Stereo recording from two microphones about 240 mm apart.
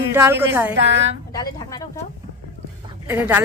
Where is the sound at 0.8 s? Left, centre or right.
Right.